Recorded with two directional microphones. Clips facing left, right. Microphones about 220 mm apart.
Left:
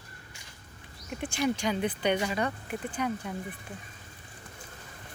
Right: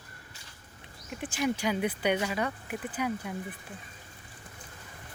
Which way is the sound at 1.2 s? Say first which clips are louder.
Left 1 dB; 5° right (ahead or behind).